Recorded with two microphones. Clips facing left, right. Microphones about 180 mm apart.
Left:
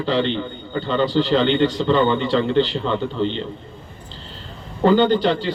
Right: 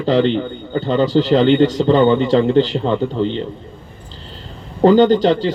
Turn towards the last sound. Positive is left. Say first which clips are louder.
# right 5 dB
turn(degrees=-40)  # may be behind; listen again after turning